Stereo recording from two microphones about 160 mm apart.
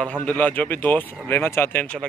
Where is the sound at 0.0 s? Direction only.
10° left (ahead or behind).